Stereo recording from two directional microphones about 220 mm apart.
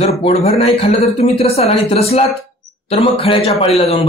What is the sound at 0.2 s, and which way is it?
Speech, 25° left (ahead or behind).